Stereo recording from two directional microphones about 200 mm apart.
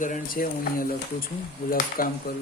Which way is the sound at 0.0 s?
45° left (ahead or behind).